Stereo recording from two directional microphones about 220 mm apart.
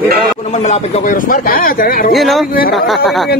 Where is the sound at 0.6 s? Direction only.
35° left (ahead or behind).